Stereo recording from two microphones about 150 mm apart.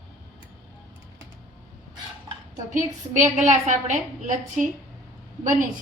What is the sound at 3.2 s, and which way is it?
A woman's voice, 55° right (ahead or behind).